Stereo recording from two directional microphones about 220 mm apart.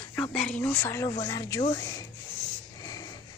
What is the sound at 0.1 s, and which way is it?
Speech, 5° left (ahead or behind).